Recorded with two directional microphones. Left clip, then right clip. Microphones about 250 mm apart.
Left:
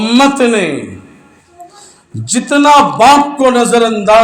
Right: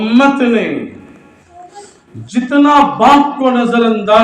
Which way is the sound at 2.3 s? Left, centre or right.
Left.